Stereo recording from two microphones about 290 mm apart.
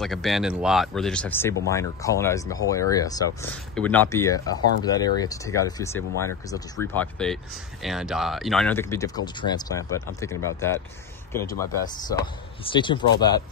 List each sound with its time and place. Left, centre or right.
0.0 s speech: centre